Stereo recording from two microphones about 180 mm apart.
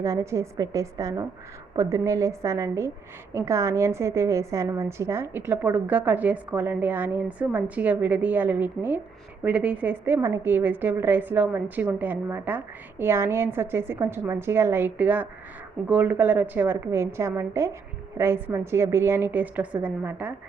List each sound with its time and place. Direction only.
0.0 s a woman's voice: 15° right (ahead or behind)